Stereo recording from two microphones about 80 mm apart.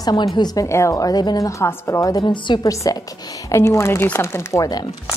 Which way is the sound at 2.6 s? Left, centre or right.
Left.